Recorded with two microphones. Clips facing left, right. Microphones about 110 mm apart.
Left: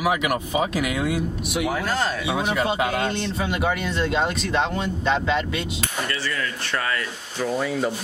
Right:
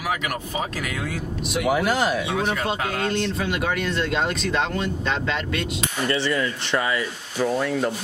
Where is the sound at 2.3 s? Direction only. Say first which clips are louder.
Left 1 dB; 10° left (ahead or behind).